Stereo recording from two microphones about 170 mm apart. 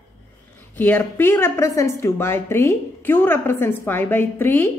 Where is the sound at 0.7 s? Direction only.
10° left (ahead or behind).